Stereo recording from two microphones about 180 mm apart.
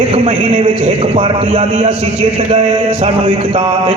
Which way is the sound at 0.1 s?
35° right (ahead or behind).